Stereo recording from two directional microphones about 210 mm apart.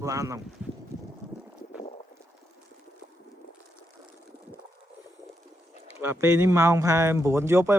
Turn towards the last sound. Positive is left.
turn(degrees=-10)  # may be behind; listen again after turning